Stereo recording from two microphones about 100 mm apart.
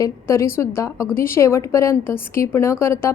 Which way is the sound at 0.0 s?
30° left (ahead or behind).